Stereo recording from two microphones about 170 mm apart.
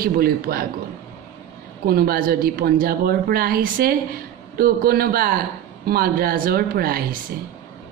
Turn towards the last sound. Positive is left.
turn(degrees=-60)  # may be behind; listen again after turning